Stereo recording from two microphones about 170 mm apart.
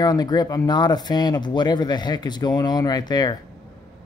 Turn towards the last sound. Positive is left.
turn(degrees=25)  # may be behind; listen again after turning